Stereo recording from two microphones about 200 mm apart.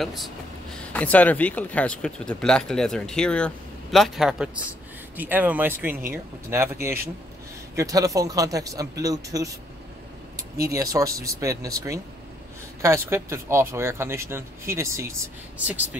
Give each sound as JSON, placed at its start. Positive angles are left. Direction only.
{"t": 0.0, "sound": "speech", "side_deg": 0}